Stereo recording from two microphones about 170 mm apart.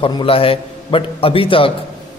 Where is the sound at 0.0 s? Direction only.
30° left (ahead or behind).